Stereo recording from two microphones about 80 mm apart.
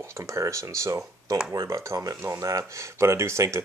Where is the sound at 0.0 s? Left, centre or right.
Right.